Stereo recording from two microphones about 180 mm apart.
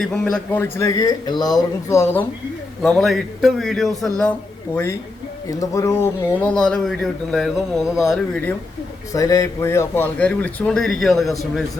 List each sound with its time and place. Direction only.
0.0 s a man's voice: 5° left (ahead or behind)
2.8 s speech: centre (ahead or behind)
9.1 s a man's voice: 20° left (ahead or behind); by 11.6 s centre (ahead or behind)